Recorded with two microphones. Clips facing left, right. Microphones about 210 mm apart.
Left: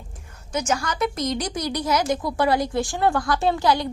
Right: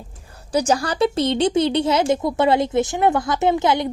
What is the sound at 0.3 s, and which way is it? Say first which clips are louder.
A woman's voice: right 6 dB; 35° right (ahead or behind).